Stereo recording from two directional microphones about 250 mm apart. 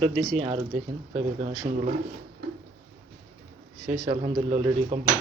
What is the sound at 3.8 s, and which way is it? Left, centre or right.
Speech, centre.